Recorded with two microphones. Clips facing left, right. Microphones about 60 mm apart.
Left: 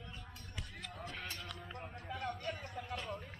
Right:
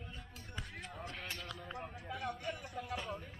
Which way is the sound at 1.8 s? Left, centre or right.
Centre.